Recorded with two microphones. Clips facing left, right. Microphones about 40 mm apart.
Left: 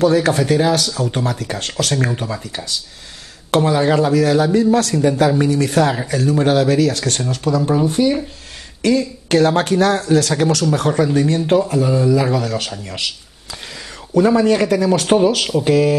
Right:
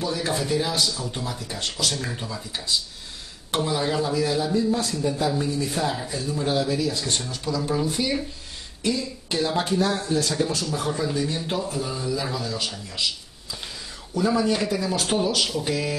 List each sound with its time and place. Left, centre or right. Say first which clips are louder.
0.0 s speech: left 12 dB; left
8.8 s speech: left 10 dB; left
15.4 s mantra: left 11 dB; left